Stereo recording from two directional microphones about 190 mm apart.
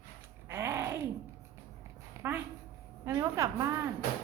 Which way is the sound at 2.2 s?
15° right (ahead or behind).